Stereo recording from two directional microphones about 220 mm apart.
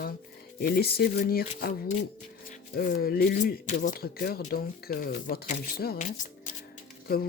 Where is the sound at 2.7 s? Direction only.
40° left (ahead or behind).